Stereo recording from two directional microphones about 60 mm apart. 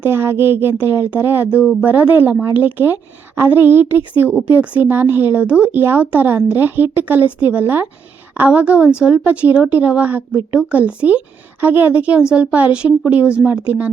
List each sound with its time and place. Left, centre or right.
0.0 s a woman's voice: right